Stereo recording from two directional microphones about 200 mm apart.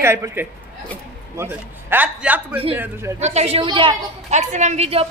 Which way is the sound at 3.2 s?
35° right (ahead or behind).